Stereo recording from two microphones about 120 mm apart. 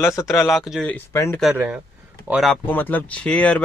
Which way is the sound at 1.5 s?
15° right (ahead or behind).